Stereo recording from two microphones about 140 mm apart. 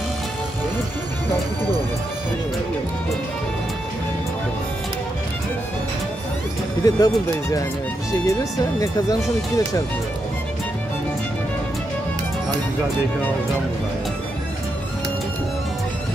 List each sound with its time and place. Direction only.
6.8 s speech: 25° left (ahead or behind)